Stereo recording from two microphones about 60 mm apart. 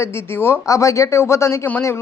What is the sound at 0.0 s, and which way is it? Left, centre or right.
Speech, left.